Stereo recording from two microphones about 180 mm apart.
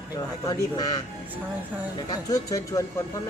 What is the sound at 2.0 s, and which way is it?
Speech, 20° left (ahead or behind).